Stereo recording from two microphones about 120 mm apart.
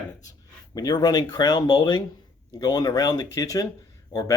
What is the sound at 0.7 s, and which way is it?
Speech, 30° left (ahead or behind).